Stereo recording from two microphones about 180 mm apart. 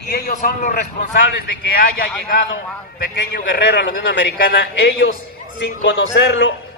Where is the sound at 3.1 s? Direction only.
75° left (ahead or behind).